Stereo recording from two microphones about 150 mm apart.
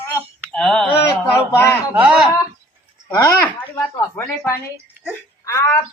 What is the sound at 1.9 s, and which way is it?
Speech, 5° right (ahead or behind).